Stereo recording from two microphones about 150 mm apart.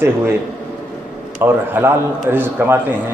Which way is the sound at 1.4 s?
15° right (ahead or behind).